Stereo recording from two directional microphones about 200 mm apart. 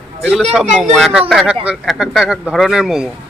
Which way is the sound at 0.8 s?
5° right (ahead or behind).